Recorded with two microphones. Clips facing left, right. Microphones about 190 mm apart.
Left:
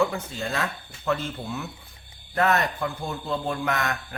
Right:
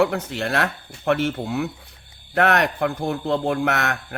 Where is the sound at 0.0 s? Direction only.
70° right (ahead or behind).